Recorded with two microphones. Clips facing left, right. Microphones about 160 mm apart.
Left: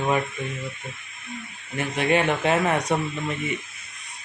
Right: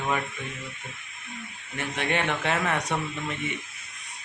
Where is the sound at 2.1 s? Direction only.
10° left (ahead or behind).